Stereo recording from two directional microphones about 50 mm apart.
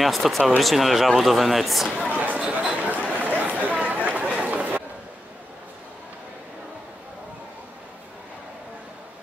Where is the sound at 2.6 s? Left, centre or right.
Right.